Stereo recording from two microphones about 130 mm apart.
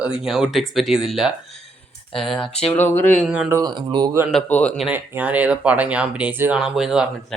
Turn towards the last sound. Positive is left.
turn(degrees=-5)  # may be behind; listen again after turning